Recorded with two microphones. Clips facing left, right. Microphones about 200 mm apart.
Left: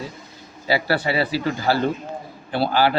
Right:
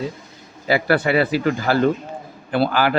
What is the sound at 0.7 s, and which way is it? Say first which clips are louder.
Speech: right 4 dB; 50° right (ahead or behind).